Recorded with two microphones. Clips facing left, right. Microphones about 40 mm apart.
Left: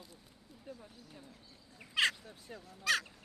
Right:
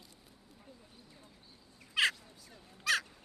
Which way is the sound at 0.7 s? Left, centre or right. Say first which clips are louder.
Left 9 dB; left.